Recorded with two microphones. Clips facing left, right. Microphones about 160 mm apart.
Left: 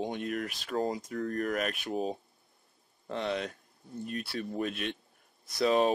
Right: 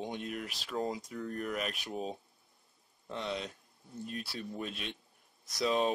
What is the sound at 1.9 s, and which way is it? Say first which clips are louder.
Speech: left 6 dB; 5° left (ahead or behind).